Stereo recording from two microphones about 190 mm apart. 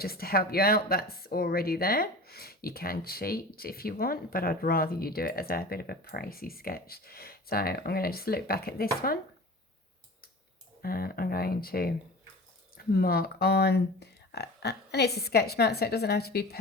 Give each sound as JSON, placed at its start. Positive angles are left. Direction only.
{"t": 0.0, "sound": "speech", "side_deg": 55}
{"t": 10.8, "sound": "speech", "side_deg": 50}